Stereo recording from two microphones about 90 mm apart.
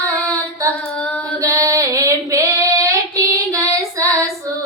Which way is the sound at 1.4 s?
35° right (ahead or behind).